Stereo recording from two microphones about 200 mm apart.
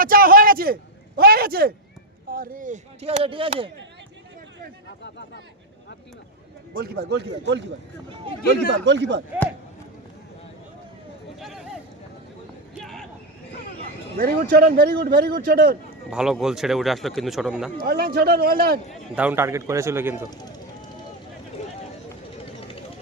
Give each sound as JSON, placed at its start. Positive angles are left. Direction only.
{"t": 0.0, "sound": "a man's voice", "side_deg": -45}
{"t": 5.0, "sound": "speech", "side_deg": 60}
{"t": 6.7, "sound": "a man's voice", "side_deg": -50}
{"t": 11.3, "sound": "a sound", "side_deg": 0}
{"t": 14.2, "sound": "a man's voice", "side_deg": -45}
{"t": 16.0, "sound": "speech", "side_deg": -5}
{"t": 17.8, "sound": "a man's voice", "side_deg": -50}
{"t": 19.1, "sound": "speech", "side_deg": -10}
{"t": 21.6, "sound": "run", "side_deg": 35}